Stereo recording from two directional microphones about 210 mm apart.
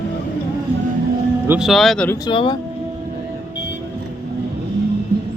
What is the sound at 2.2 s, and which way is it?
Speech, 20° left (ahead or behind).